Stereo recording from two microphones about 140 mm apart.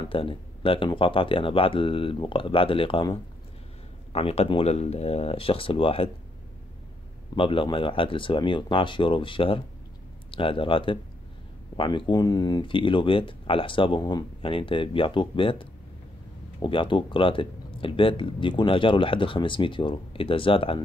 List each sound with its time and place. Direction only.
0.1 s speech: 40° left (ahead or behind)
7.3 s speech: 40° left (ahead or behind)